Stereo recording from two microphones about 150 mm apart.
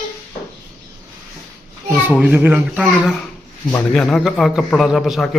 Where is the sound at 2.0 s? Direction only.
10° right (ahead or behind).